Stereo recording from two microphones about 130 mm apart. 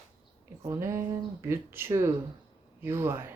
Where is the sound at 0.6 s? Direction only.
20° right (ahead or behind).